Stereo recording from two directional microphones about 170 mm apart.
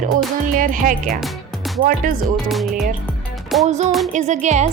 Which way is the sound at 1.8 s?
55° right (ahead or behind).